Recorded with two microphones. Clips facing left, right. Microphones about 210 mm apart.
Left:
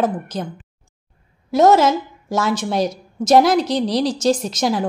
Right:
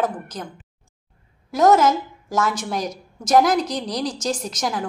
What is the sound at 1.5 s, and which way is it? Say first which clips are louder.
A woman's voice: left 2 dB; 25° left (ahead or behind).